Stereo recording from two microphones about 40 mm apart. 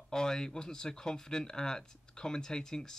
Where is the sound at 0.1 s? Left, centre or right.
Centre.